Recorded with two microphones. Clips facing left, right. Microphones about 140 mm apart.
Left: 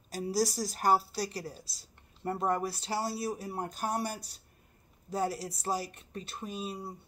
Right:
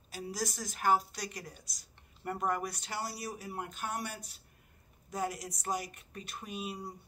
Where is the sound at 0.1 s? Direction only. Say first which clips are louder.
Left 8 dB; 35° left (ahead or behind).